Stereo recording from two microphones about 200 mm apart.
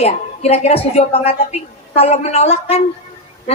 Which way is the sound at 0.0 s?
30° left (ahead or behind).